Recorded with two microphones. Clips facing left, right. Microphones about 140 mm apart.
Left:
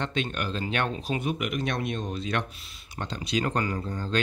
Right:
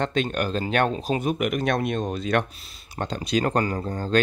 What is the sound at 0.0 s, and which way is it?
Speech, 45° right (ahead or behind).